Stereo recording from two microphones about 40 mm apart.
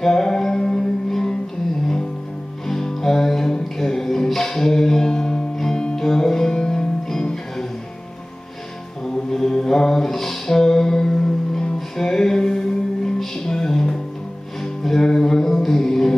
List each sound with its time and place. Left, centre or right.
0.0 s music: centre
2.7 s music: centre
9.0 s mantra: centre
12.0 s music: centre